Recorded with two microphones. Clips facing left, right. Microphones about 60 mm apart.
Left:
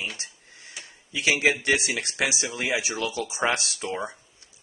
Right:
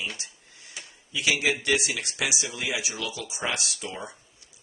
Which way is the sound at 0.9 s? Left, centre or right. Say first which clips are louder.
Left 2 dB; left.